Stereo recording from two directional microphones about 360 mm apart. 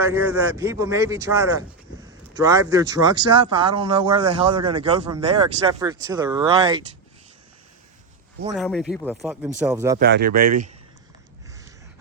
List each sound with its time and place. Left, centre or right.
0.0 s speech: centre
8.5 s speech: centre
10.0 s speech: right